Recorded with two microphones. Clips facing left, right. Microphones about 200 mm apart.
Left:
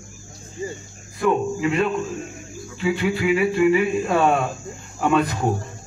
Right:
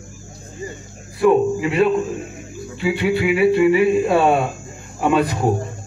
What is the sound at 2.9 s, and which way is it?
Music, 30° right (ahead or behind).